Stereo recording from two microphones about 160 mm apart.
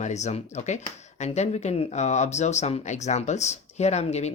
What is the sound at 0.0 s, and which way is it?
Speech, 45° left (ahead or behind).